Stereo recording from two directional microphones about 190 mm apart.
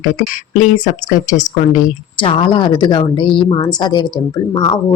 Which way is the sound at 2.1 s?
25° left (ahead or behind).